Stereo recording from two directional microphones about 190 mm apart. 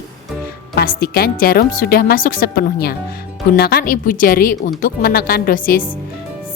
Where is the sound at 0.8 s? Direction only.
55° left (ahead or behind).